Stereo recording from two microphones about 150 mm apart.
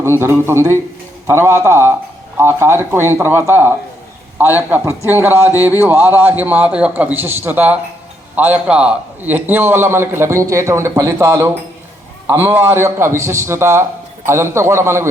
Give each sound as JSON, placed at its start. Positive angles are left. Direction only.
{"t": 0.0, "sound": "a man's voice", "side_deg": -15}